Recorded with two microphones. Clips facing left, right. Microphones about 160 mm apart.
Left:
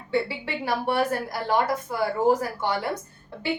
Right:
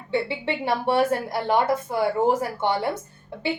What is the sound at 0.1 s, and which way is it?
A woman's voice, 25° right (ahead or behind).